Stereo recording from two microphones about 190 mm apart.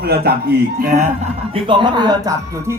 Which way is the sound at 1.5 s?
25° right (ahead or behind).